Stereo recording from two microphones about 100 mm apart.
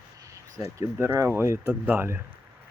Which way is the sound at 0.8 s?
25° right (ahead or behind).